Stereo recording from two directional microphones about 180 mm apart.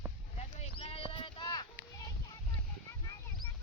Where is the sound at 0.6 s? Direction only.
35° left (ahead or behind); by 3.5 s 20° left (ahead or behind).